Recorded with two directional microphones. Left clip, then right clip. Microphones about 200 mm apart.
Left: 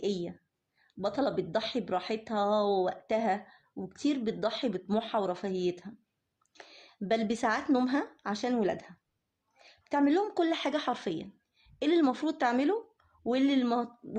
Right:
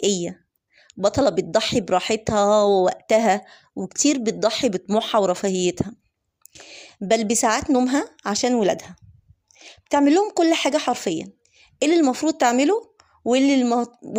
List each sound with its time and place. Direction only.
0.0 s speech: 40° right (ahead or behind)
9.6 s a sound: 40° right (ahead or behind)
10.2 s a woman's voice: 35° right (ahead or behind)